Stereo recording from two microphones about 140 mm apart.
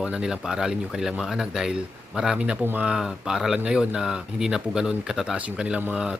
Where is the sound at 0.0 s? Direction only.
5° right (ahead or behind).